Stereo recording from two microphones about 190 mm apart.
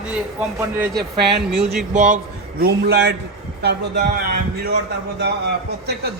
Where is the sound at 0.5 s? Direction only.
15° right (ahead or behind).